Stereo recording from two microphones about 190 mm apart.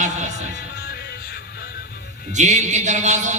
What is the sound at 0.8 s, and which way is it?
Music, 55° left (ahead or behind).